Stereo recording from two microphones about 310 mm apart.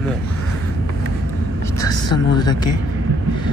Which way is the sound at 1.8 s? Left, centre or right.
Centre.